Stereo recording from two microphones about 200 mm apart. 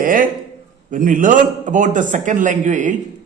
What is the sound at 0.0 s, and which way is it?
A man's voice, 45° right (ahead or behind).